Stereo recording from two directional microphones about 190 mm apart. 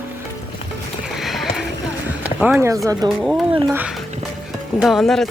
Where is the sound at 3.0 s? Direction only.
20° right (ahead or behind).